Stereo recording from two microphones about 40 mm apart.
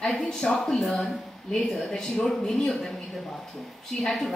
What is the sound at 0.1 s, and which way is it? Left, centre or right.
A woman's voice, centre.